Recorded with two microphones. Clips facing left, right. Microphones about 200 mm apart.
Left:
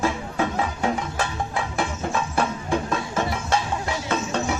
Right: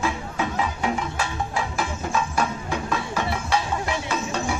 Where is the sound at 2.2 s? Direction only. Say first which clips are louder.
Even; 50° left (ahead or behind).